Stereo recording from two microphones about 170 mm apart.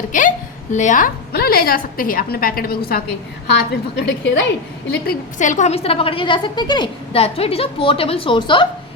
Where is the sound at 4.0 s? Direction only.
90° left.